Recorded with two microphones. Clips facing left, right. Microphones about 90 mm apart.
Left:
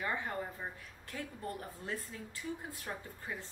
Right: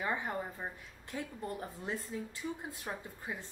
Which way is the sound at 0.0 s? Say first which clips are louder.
Right 2 dB; 15° right (ahead or behind).